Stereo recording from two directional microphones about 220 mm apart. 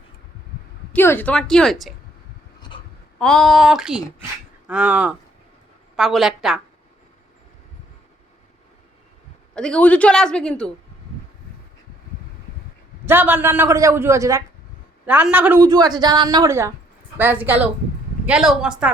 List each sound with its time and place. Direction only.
0.9 s a woman's voice: 10° left (ahead or behind)
2.6 s a sound: 20° left (ahead or behind)
3.2 s a woman's voice: 5° left (ahead or behind)
9.6 s a woman's voice: 5° left (ahead or behind)
13.1 s a man's voice: 10° right (ahead or behind)